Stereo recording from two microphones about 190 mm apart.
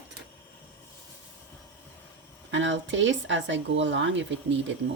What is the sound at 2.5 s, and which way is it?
Speech, 75° right (ahead or behind).